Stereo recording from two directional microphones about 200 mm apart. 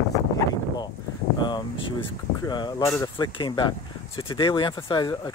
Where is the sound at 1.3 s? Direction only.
20° left (ahead or behind).